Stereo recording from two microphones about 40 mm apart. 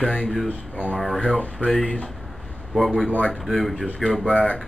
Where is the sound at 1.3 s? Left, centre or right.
Left.